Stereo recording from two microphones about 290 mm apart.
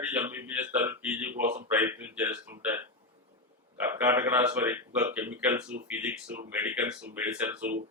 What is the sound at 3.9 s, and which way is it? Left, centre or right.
Speech, centre.